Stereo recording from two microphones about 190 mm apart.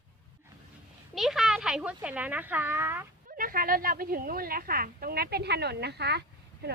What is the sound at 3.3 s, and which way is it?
A woman's voice, 50° right (ahead or behind).